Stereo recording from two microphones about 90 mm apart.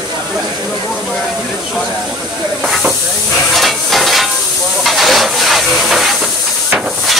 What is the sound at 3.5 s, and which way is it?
Hiss, centre (ahead or behind).